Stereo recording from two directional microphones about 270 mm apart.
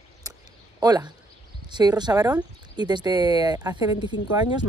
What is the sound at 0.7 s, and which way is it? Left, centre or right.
Speech, centre.